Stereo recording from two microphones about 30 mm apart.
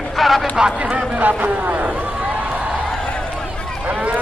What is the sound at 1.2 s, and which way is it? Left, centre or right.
Speech, right.